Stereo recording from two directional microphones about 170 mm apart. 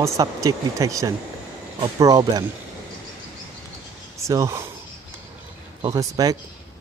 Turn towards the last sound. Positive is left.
turn(degrees=-20)  # may be behind; listen again after turning